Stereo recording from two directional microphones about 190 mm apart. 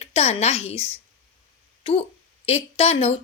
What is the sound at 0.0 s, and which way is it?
A woman's voice, 35° left (ahead or behind).